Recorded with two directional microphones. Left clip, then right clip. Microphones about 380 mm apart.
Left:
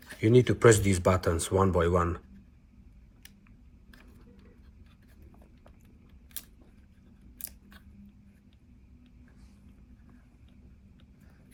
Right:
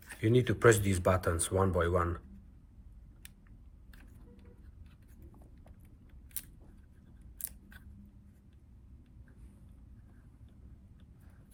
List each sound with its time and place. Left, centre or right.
0.2 s speech: centre